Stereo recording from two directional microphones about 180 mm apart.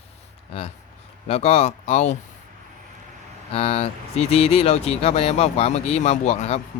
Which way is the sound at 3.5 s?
35° left (ahead or behind).